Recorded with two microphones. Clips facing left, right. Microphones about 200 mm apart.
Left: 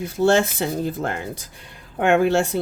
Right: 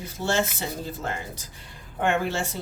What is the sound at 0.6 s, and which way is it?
Speech, 60° left (ahead or behind).